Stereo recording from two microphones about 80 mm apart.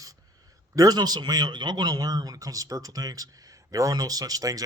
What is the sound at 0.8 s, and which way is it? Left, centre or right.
A man's voice, right.